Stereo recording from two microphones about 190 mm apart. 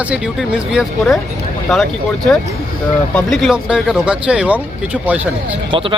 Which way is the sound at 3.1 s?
Centre (ahead or behind).